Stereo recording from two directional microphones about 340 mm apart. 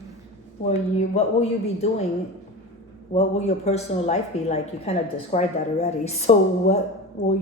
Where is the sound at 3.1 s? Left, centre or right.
Centre.